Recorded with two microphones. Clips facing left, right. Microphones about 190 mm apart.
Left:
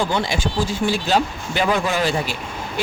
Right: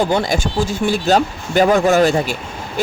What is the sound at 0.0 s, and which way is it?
Speech, 45° right (ahead or behind).